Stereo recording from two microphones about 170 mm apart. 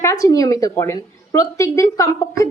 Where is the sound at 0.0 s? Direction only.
15° left (ahead or behind).